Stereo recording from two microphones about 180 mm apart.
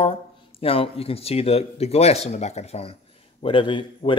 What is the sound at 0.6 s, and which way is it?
A man's voice, 30° left (ahead or behind).